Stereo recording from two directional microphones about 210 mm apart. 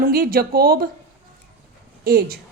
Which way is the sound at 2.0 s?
45° right (ahead or behind).